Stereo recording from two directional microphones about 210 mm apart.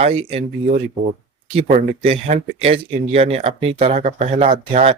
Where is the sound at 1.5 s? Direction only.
30° right (ahead or behind).